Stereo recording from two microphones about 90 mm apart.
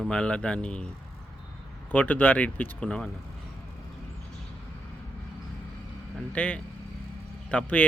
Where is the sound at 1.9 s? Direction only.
20° left (ahead or behind).